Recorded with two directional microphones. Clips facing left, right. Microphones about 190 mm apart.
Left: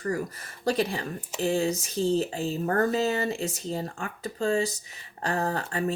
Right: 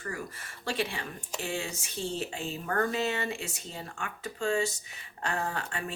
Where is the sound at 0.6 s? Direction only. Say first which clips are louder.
Left 7 dB; 40° left (ahead or behind).